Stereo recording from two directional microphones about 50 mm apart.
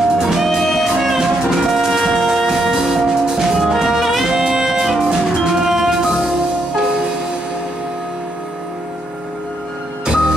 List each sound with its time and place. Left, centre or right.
0.2 s music: centre
10.0 s music: centre